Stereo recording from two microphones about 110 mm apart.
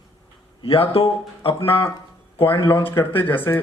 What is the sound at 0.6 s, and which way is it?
Speech, 55° left (ahead or behind).